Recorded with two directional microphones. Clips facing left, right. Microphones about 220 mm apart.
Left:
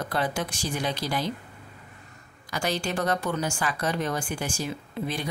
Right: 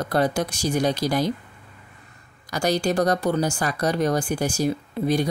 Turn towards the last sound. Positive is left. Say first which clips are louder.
# right 9 dB
turn(degrees=-40)  # may be behind; listen again after turning